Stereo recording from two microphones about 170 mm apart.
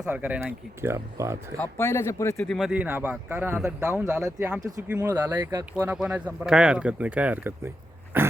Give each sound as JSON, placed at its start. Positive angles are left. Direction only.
{"t": 0.0, "sound": "speech", "side_deg": -10}
{"t": 1.5, "sound": "speech", "side_deg": 15}
{"t": 2.5, "sound": "speech", "side_deg": 0}
{"t": 5.8, "sound": "speech", "side_deg": -5}
{"t": 8.1, "sound": "dog", "side_deg": -10}